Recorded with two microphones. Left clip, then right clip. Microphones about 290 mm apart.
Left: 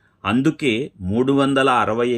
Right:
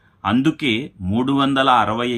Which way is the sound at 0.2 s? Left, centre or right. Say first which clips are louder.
Right 1 dB; centre.